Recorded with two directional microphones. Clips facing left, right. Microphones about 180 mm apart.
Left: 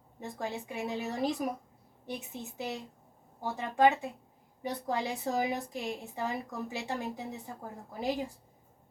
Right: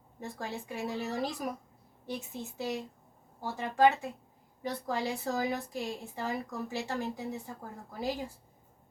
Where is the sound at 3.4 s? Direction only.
20° left (ahead or behind).